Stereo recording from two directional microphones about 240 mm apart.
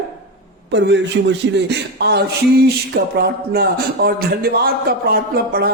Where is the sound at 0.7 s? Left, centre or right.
Right.